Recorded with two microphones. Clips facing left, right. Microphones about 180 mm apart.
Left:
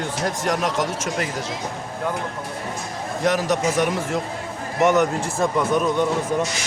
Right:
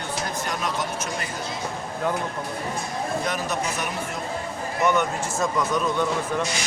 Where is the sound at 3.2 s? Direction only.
90° left.